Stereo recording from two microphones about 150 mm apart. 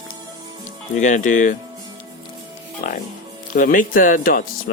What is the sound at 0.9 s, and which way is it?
Speech, 55° left (ahead or behind).